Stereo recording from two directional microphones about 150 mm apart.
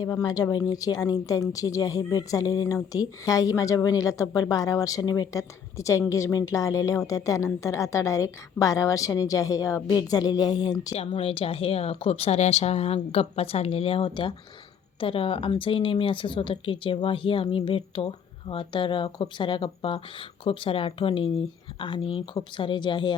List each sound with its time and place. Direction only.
0.0 s a woman's voice: 25° left (ahead or behind)
10.9 s speech: 40° left (ahead or behind)